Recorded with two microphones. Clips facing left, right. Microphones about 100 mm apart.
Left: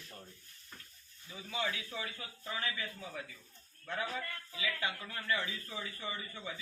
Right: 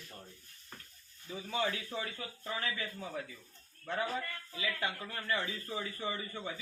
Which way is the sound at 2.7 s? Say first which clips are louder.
Right 3 dB; 40° right (ahead or behind).